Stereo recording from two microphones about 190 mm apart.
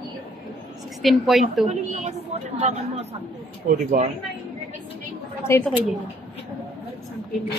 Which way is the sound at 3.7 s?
45° right (ahead or behind).